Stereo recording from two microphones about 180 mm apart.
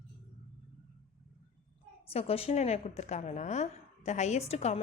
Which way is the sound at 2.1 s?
35° left (ahead or behind).